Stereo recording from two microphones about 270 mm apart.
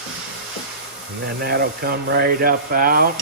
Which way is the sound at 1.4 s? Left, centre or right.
Right.